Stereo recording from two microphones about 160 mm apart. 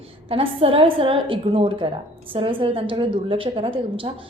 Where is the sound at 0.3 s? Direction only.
35° right (ahead or behind).